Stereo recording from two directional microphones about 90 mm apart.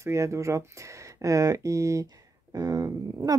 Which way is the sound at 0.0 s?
35° right (ahead or behind).